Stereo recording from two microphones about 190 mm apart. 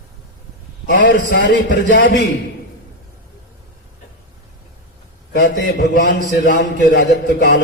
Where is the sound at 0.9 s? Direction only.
50° left (ahead or behind).